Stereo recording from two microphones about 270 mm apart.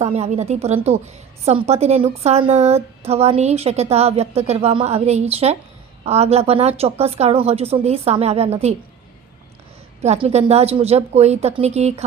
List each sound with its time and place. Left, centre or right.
0.0 s a woman's voice: right
10.0 s a woman's voice: right